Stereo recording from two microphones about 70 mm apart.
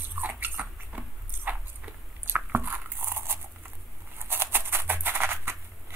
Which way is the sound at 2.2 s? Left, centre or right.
Right.